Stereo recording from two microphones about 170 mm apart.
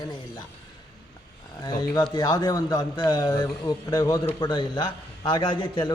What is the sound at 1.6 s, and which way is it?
A man's voice, 25° left (ahead or behind).